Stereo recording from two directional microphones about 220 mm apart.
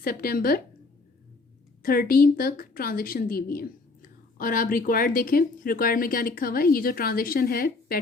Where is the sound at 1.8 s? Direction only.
40° left (ahead or behind).